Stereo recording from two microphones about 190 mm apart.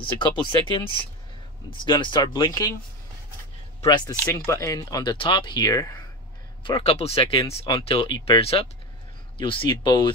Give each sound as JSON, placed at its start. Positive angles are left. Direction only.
{"t": 0.0, "sound": "speech", "side_deg": 25}
{"t": 3.8, "sound": "speech", "side_deg": 20}
{"t": 6.6, "sound": "speech", "side_deg": 30}